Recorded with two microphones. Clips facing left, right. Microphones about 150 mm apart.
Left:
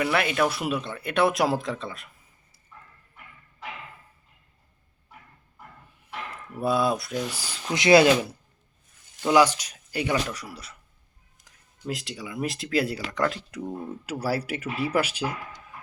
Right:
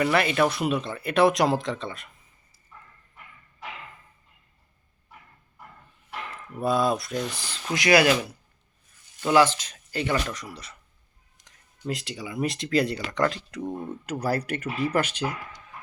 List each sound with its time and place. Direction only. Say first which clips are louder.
0.0 s speech: right 2 dB; centre (ahead or behind)
6.6 s speech: even; 5° left (ahead or behind)
7.7 s speech: left 3 dB; 25° left (ahead or behind)
9.2 s speech: even; 15° left (ahead or behind)